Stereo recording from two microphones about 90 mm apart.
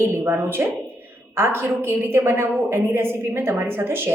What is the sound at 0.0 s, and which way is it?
A woman's voice, 25° right (ahead or behind).